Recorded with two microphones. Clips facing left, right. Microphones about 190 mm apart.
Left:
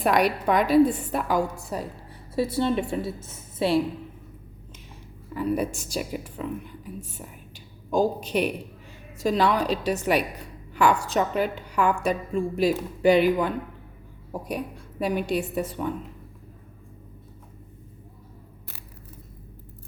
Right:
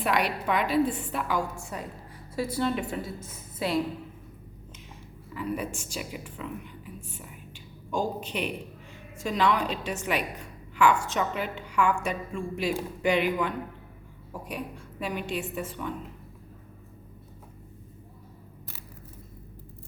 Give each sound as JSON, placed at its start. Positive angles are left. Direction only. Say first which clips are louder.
{"t": 0.0, "sound": "a woman's voice", "louder": "left 5 dB", "side_deg": 40}
{"t": 2.3, "sound": "a woman's voice", "louder": "left 4 dB", "side_deg": 25}
{"t": 5.3, "sound": "a woman's voice", "louder": "left 6 dB", "side_deg": 40}